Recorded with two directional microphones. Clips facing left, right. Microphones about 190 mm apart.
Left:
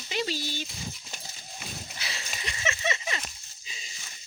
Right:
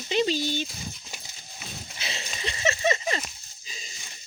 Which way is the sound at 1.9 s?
25° right (ahead or behind).